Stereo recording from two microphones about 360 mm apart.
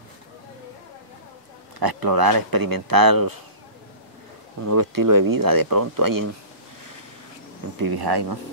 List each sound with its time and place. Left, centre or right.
1.8 s speech: right
4.6 s speech: right
7.8 s speech: right